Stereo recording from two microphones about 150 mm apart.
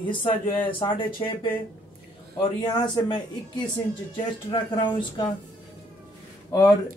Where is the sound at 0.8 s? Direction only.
35° left (ahead or behind).